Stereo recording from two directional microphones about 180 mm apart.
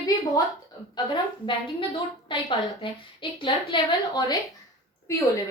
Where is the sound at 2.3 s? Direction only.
30° left (ahead or behind).